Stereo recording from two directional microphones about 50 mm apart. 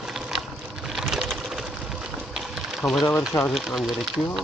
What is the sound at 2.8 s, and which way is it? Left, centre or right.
Speech, centre.